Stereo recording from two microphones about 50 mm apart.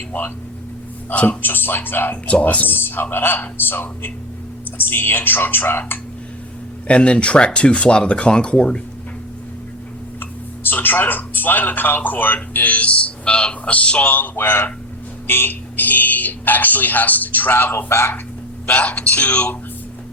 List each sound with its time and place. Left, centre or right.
0.1 s speech: left
1.1 s speech: left
1.4 s speech: left
2.2 s speech: left
2.6 s speech: left
6.8 s speech: left
10.2 s speech: left
14.3 s speech: left
18.6 s speech: left